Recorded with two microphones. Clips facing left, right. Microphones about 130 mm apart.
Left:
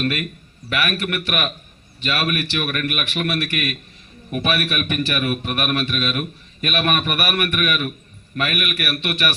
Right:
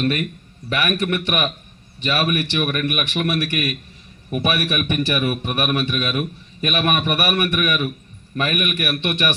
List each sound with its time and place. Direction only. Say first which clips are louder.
0.0 s a man's voice: right 2 dB; 20° right (ahead or behind)